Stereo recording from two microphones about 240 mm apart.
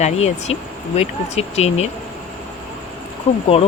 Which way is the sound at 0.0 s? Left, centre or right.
Left.